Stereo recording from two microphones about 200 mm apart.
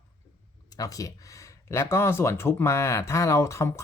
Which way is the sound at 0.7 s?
15° left (ahead or behind).